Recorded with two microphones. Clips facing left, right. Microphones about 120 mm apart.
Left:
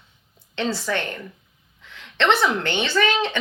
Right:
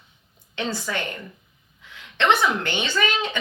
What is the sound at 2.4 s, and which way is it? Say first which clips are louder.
Speech: left 2 dB; 15° right (ahead or behind).